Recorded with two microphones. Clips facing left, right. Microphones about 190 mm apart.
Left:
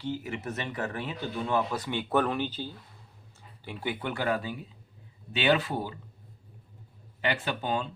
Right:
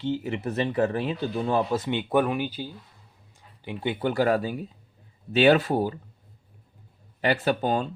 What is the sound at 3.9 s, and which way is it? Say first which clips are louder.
Speech: right 8 dB; 35° right (ahead or behind).